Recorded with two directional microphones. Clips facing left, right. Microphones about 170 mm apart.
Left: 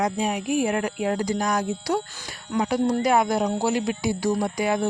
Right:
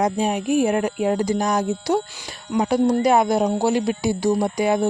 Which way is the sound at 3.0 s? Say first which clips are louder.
Right 4 dB; 25° right (ahead or behind).